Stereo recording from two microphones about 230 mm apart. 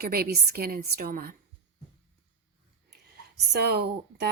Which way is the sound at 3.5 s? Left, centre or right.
Right.